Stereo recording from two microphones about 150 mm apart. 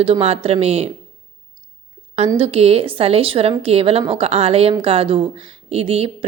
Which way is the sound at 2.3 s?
40° right (ahead or behind).